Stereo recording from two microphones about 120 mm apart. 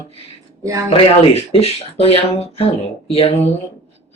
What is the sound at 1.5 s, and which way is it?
Speech, 55° left (ahead or behind).